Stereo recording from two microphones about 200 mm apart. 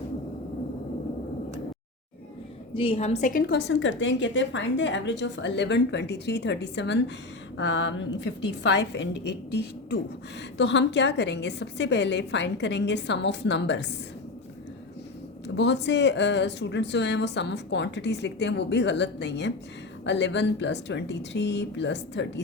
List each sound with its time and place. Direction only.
2.7 s a woman's voice: 30° left (ahead or behind); by 13.8 s 60° left (ahead or behind)
15.4 s a woman's voice: 60° left (ahead or behind)